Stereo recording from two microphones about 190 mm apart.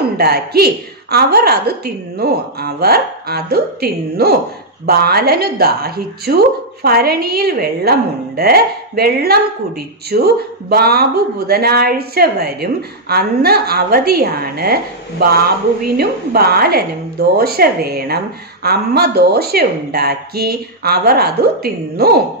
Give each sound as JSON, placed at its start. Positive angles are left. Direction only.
{"t": 0.0, "sound": "a woman's voice", "side_deg": -55}